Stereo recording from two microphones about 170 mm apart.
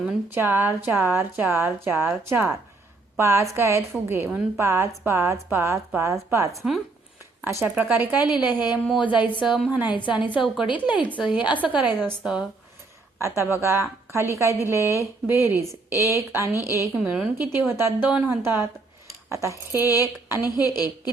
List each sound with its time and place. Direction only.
0.1 s a woman's voice: 10° right (ahead or behind)
9.0 s a woman's voice: 25° left (ahead or behind)
9.5 s a woman's voice: 5° right (ahead or behind)
13.1 s a woman's voice: 15° right (ahead or behind)
16.0 s a woman's voice: 20° left (ahead or behind)
16.3 s a woman's voice: 15° right (ahead or behind)
19.7 s a woman's voice: 20° left (ahead or behind)